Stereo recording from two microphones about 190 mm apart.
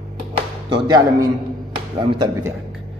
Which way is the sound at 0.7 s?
20° right (ahead or behind).